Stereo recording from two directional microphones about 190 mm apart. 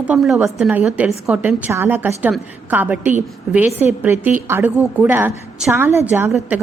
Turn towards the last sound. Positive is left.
turn(degrees=-10)  # may be behind; listen again after turning